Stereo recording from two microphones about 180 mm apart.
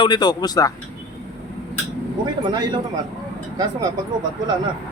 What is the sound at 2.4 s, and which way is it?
Speech, 25° right (ahead or behind).